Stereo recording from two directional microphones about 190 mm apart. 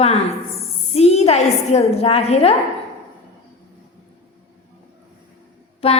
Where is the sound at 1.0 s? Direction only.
35° left (ahead or behind).